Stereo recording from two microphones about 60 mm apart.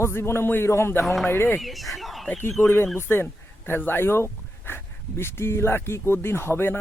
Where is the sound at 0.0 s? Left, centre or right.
Left.